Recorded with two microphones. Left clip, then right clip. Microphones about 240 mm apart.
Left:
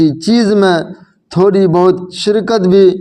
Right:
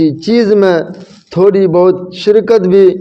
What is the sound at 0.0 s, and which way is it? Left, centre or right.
A man's voice, left.